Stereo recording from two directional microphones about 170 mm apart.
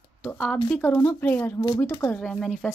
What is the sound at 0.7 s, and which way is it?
Speech, 10° left (ahead or behind).